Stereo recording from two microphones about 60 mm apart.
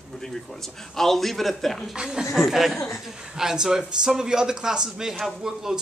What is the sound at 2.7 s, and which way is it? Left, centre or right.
Speech, left.